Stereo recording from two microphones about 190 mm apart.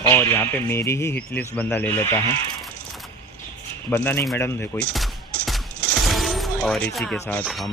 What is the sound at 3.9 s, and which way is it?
Speech, 10° left (ahead or behind).